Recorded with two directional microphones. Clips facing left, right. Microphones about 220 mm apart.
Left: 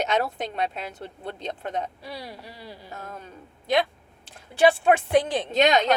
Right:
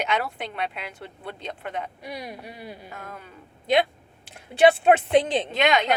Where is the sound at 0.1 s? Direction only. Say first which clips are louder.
Left 2 dB; 40° left (ahead or behind).